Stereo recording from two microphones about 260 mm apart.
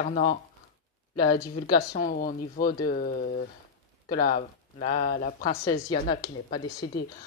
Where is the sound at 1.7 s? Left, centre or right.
Left.